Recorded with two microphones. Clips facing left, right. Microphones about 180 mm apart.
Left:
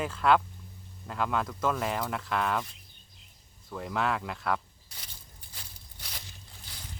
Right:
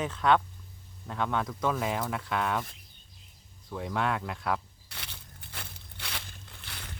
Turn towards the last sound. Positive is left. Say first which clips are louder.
# right 3 dB
turn(degrees=-65)  # may be behind; listen again after turning